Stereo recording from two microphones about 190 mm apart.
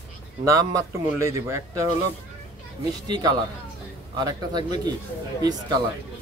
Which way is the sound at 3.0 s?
20° right (ahead or behind).